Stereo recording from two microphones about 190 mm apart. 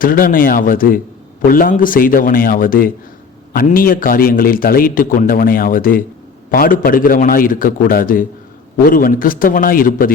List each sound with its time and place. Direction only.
0.0 s a man's voice: 45° left (ahead or behind)